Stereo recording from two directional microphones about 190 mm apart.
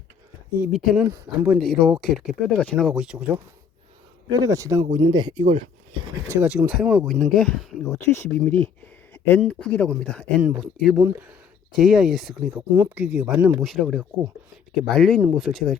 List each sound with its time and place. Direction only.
0.6 s speech: 5° right (ahead or behind)
4.3 s speech: 20° right (ahead or behind)
6.2 s speech: 10° right (ahead or behind)
7.9 s speech: 15° left (ahead or behind)
10.9 s speech: 10° right (ahead or behind)
11.8 s speech: centre (ahead or behind)
12.5 s speech: 15° right (ahead or behind)
13.6 s speech: centre (ahead or behind)